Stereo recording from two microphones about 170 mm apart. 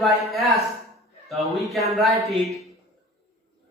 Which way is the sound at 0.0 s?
Centre (ahead or behind).